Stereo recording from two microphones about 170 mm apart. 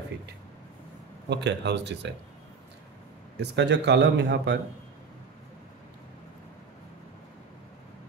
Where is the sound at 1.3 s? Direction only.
90° right.